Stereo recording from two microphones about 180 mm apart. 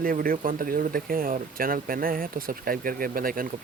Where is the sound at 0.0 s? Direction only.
50° right (ahead or behind).